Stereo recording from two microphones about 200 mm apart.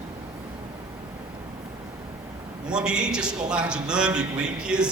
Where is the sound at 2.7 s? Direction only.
5° right (ahead or behind).